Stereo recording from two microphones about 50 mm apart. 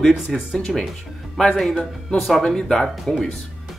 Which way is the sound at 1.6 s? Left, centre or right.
Centre.